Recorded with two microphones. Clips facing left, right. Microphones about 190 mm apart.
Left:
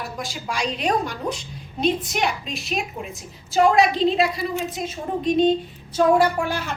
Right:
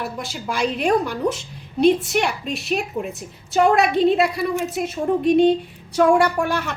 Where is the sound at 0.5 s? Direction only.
55° right (ahead or behind).